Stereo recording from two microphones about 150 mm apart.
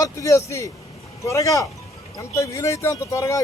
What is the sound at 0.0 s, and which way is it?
Speech, 20° left (ahead or behind).